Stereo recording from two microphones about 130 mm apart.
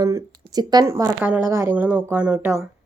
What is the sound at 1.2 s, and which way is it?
Speech, 15° right (ahead or behind).